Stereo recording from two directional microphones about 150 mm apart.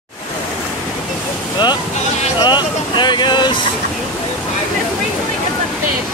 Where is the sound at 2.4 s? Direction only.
30° left (ahead or behind).